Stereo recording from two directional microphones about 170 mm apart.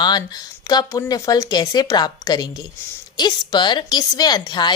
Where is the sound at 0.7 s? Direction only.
20° left (ahead or behind).